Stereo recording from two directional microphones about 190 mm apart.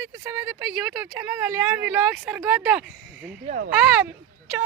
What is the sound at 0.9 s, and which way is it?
Speech, 10° right (ahead or behind).